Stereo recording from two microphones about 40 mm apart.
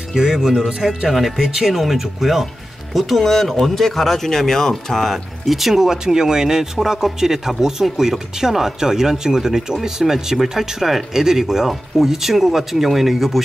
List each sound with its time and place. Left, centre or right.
0.3 s speech: centre